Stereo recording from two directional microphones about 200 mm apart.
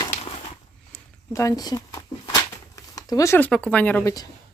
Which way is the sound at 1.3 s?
15° left (ahead or behind).